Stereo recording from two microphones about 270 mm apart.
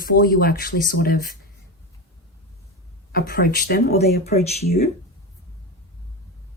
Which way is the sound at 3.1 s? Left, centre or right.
Left.